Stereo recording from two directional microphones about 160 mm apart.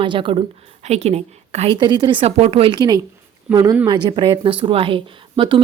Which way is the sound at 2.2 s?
40° right (ahead or behind).